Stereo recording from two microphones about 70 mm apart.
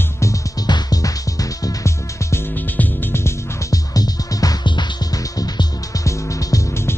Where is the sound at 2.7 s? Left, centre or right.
Left.